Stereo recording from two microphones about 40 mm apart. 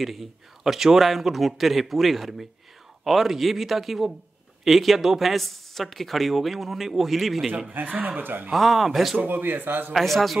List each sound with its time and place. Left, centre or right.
0.0 s speech: centre
7.9 s speech: right
8.2 s speech: right
8.5 s speech: centre
9.2 s speech: right
9.9 s speech: centre